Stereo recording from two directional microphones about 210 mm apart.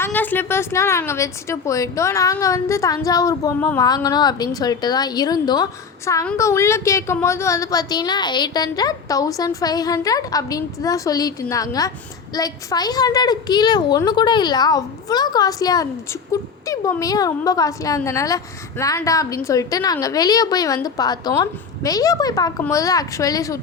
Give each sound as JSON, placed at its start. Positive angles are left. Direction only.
{"t": 0.0, "sound": "a woman's voice", "side_deg": 10}